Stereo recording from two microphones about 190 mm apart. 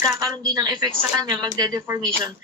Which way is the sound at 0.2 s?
20° right (ahead or behind).